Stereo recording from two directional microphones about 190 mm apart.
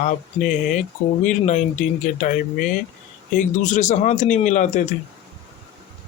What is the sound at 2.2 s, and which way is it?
Speech, 45° left (ahead or behind).